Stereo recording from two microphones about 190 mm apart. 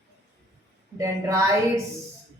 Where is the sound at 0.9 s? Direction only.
15° right (ahead or behind).